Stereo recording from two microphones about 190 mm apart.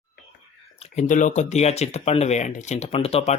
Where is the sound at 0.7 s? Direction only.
35° left (ahead or behind).